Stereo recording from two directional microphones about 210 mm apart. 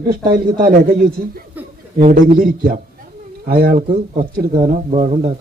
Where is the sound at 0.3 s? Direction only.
40° right (ahead or behind).